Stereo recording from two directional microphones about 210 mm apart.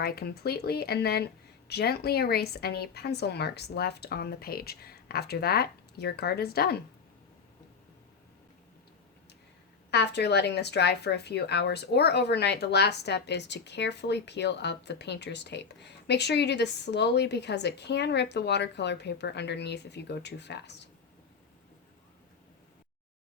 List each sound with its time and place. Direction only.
0.0 s speech: 50° left (ahead or behind)
9.9 s speech: 55° left (ahead or behind)